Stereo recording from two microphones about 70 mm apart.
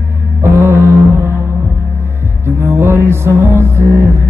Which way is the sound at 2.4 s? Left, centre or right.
Right.